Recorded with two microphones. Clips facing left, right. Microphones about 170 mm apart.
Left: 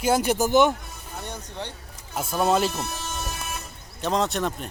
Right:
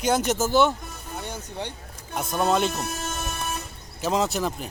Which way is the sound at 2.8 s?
50° right (ahead or behind).